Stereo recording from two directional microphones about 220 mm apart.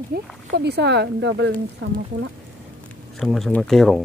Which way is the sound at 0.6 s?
50° right (ahead or behind).